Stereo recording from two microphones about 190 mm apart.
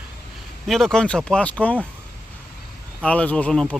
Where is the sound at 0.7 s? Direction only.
Centre (ahead or behind).